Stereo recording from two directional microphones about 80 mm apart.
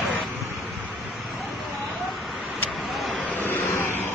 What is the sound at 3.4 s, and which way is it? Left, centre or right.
Vehicle, left.